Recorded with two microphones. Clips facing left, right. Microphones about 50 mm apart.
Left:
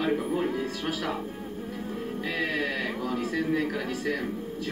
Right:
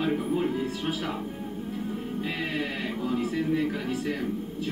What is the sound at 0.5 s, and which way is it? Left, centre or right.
Speech, right.